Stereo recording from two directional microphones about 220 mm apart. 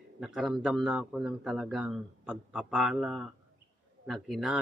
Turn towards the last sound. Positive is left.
turn(degrees=0)  # may be behind; listen again after turning